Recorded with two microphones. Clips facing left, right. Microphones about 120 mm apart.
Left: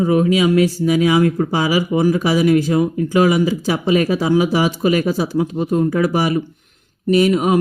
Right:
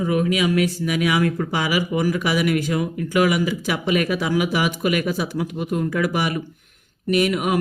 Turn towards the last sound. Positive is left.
turn(degrees=30)  # may be behind; listen again after turning